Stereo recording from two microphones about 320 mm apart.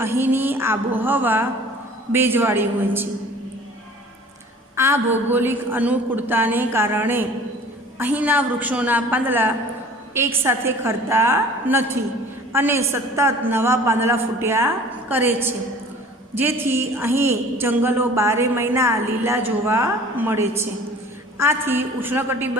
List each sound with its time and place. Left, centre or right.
0.0 s a woman's voice: centre
4.8 s a woman's voice: centre